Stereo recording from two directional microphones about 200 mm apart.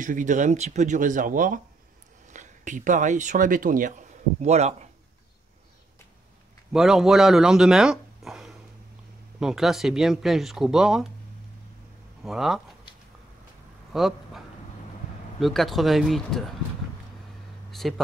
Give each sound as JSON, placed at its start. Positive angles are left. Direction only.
{"t": 0.0, "sound": "speech", "side_deg": -40}
{"t": 6.7, "sound": "speech", "side_deg": 0}
{"t": 12.2, "sound": "speech", "side_deg": 0}
{"t": 13.9, "sound": "speech", "side_deg": 0}
{"t": 15.4, "sound": "speech", "side_deg": 0}
{"t": 17.6, "sound": "speech", "side_deg": 0}